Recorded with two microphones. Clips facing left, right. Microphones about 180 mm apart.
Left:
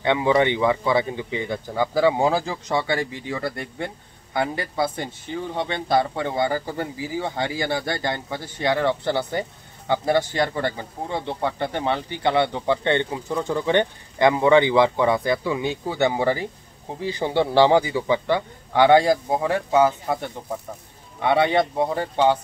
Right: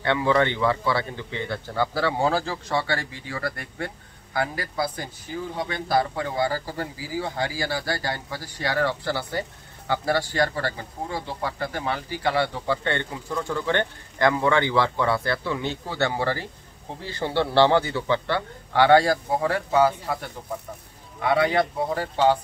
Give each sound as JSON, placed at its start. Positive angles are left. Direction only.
{"t": 0.0, "sound": "a man's voice", "side_deg": 15}